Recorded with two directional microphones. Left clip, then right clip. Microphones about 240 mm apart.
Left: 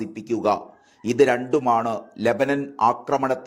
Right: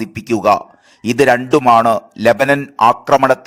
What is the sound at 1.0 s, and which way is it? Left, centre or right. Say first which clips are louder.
A man's voice: right 7 dB; right.